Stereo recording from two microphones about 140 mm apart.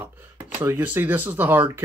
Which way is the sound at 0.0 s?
15° right (ahead or behind).